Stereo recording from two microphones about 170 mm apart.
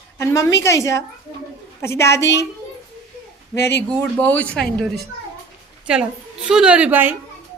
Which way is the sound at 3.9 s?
5° left (ahead or behind).